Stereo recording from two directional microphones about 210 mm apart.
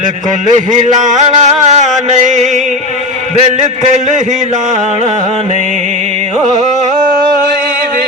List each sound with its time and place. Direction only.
0.5 s music: 35° right (ahead or behind)